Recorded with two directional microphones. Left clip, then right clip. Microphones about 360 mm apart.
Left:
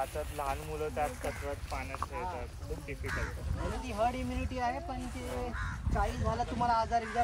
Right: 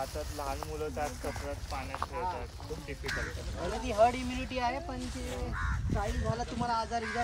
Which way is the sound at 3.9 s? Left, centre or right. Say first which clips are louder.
Right 6 dB; right.